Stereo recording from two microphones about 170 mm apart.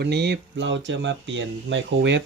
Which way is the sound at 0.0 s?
80° right.